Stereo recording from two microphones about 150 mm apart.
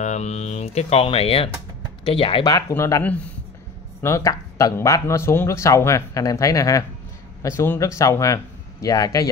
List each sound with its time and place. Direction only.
0.0 s speech: 50° left (ahead or behind)
2.4 s speech: 20° left (ahead or behind)